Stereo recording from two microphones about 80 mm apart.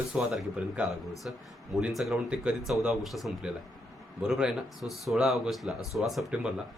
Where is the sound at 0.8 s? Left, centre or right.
Centre.